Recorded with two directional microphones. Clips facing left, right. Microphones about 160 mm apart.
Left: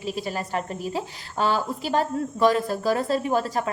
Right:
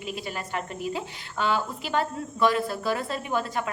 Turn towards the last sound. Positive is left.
turn(degrees=35)  # may be behind; listen again after turning